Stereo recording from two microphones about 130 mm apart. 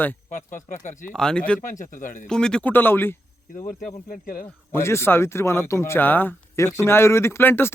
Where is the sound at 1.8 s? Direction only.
90° left.